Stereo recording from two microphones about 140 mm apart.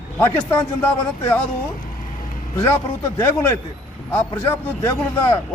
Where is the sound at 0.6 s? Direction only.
10° left (ahead or behind).